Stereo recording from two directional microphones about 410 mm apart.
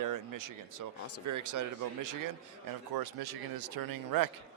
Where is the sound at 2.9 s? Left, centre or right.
Right.